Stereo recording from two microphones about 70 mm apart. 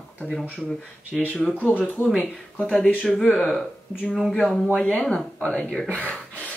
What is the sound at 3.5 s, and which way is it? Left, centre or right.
Speech, centre.